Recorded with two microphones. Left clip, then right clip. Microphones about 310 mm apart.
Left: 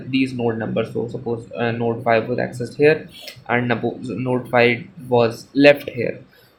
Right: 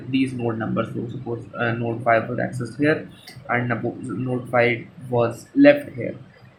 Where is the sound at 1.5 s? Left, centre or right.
Centre.